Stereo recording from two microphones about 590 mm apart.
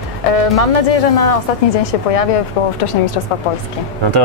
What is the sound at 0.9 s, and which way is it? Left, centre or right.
Speech, left.